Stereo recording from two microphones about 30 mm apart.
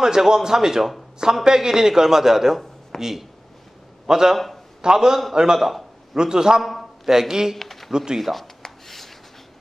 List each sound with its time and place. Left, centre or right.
0.0 s a man's voice: right
5.6 s speech: centre
6.1 s a man's voice: right
6.6 s a man's voice: centre
7.1 s a man's voice: centre
7.5 s a sound: centre
7.9 s a man's voice: right
8.2 s speech: centre
8.6 s a sound: centre